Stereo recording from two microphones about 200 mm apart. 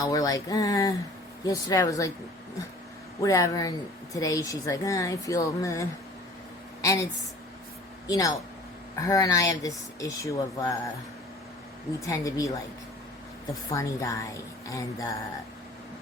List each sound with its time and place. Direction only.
0.0 s speech: 20° left (ahead or behind)
3.2 s speech: 15° left (ahead or behind)
6.8 s speech: 15° left (ahead or behind)
11.9 s speech: 15° left (ahead or behind)
13.7 s speech: 15° left (ahead or behind)